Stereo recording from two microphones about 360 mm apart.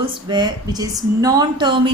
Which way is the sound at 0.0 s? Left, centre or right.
Centre.